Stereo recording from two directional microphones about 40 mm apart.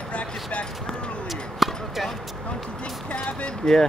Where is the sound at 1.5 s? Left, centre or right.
Centre.